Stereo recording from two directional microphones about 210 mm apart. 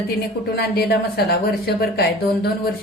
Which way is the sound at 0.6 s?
50° left (ahead or behind).